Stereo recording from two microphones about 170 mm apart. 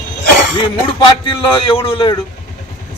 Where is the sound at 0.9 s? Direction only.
30° left (ahead or behind).